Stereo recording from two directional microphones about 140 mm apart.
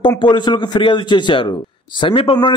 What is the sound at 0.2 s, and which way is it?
A man's voice, 35° left (ahead or behind).